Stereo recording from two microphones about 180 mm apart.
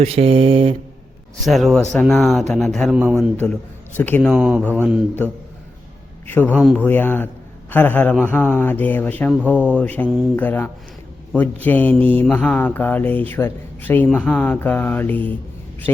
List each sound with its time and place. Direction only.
0.0 s mantra: 35° right (ahead or behind)
1.5 s a man's voice: centre (ahead or behind)
3.3 s a man's voice: 10° left (ahead or behind)
4.6 s mantra: 10° left (ahead or behind)
6.5 s a man's voice: 5° left (ahead or behind)
6.8 s mantra: 10° left (ahead or behind)